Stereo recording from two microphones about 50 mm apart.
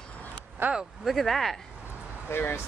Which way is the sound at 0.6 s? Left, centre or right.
Right.